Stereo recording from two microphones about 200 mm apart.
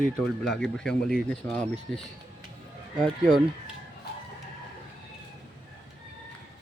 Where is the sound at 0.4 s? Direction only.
5° left (ahead or behind).